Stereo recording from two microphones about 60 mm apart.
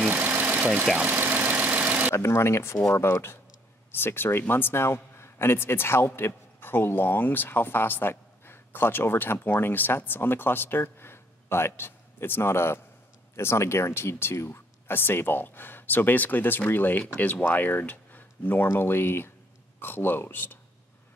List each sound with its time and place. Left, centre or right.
0.2 s engine: right
2.1 s a man's voice: left